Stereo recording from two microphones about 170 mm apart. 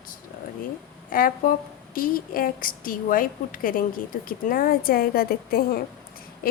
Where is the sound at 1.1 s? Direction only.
55° left (ahead or behind).